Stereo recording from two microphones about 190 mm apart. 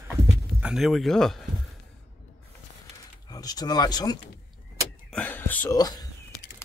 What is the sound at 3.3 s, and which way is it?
Speech, 20° left (ahead or behind).